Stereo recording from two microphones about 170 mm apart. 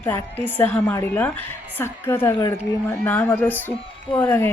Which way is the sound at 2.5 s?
10° left (ahead or behind).